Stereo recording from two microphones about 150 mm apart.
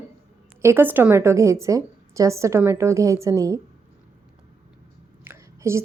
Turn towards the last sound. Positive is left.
turn(degrees=-20)  # may be behind; listen again after turning